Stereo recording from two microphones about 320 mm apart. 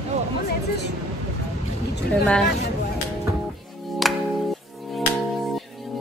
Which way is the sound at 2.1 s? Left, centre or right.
Centre.